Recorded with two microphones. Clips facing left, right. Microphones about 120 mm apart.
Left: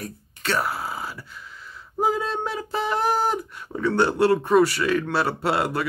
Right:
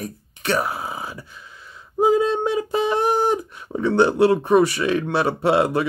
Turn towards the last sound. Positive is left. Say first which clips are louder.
# right 5 dB
turn(degrees=-20)  # may be behind; listen again after turning